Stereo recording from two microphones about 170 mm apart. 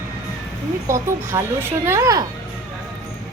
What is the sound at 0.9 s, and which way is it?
Speech, 15° right (ahead or behind).